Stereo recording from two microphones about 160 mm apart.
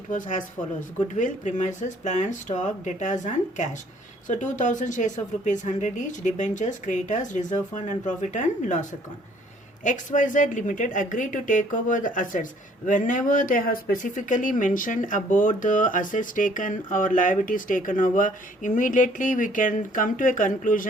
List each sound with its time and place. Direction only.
0.1 s a woman's voice: 55° left (ahead or behind)